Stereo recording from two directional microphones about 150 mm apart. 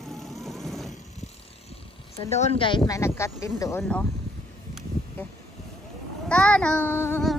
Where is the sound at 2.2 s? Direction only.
45° left (ahead or behind).